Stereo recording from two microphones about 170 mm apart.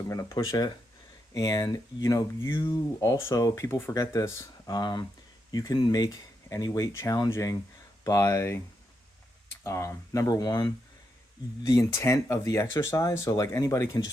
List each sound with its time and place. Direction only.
0.1 s speech: 20° left (ahead or behind)
9.6 s speech: 15° left (ahead or behind)